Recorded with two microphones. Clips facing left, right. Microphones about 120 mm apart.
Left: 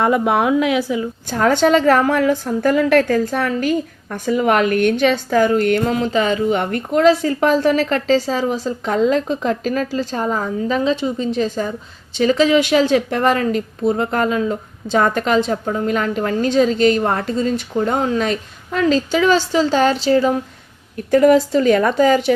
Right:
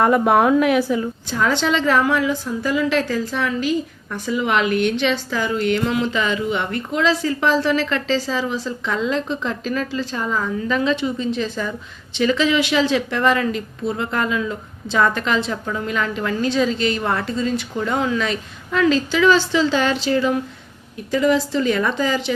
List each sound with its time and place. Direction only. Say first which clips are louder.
0.0 s a woman's voice: right 1 dB; 15° left (ahead or behind)
1.3 s a woman's voice: left 6 dB; 50° left (ahead or behind)
21.1 s a woman's voice: left 6 dB; 50° left (ahead or behind)